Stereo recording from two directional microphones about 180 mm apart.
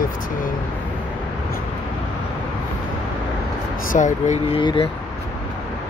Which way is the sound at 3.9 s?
45° left (ahead or behind).